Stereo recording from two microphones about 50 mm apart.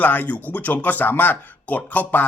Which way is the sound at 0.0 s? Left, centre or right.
Left.